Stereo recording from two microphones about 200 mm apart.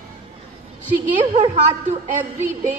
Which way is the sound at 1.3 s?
35° right (ahead or behind).